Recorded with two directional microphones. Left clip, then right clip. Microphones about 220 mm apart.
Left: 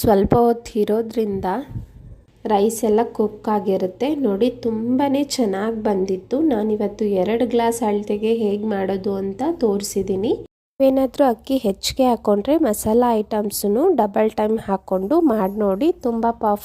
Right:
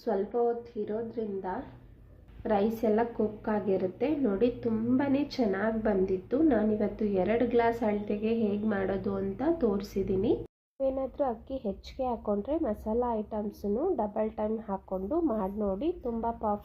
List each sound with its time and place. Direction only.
0.0 s a woman's voice: 50° left (ahead or behind)
2.4 s a woman's voice: 30° left (ahead or behind)
10.8 s speech: 55° left (ahead or behind)